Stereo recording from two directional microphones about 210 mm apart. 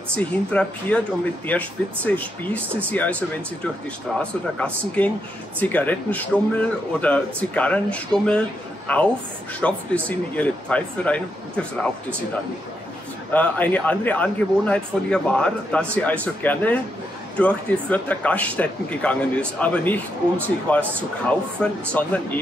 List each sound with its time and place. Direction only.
0.1 s a man's voice: 5° left (ahead or behind)
13.3 s a man's voice: 10° left (ahead or behind)